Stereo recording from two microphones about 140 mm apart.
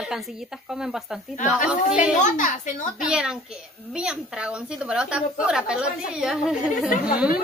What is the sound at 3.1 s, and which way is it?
A woman's voice, 5° right (ahead or behind).